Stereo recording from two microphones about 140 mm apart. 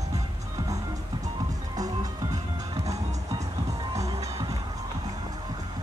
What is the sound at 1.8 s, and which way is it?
Music, 25° right (ahead or behind).